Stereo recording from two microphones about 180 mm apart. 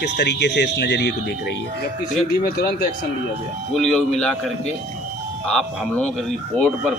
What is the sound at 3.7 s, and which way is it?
Speech, centre (ahead or behind).